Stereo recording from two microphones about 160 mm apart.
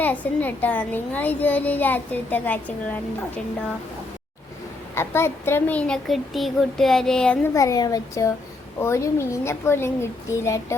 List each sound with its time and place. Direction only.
0.0 s a child's voice: 10° left (ahead or behind)
4.9 s a child's voice: 15° left (ahead or behind)
7.5 s a child's voice: 20° left (ahead or behind)